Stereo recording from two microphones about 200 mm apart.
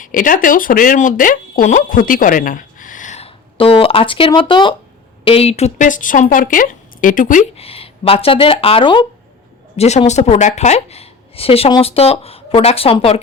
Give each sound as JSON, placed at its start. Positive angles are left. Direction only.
{"t": 0.0, "sound": "a woman's voice", "side_deg": 40}